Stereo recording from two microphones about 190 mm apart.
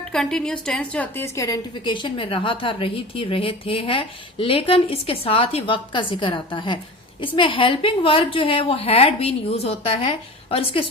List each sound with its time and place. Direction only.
0.1 s a woman's voice: 5° left (ahead or behind); by 10.8 s 30° left (ahead or behind)